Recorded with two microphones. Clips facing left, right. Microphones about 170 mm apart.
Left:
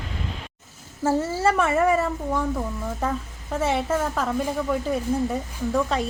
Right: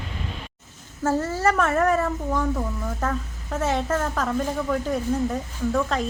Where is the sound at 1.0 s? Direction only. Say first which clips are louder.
Left 1 dB; 10° left (ahead or behind).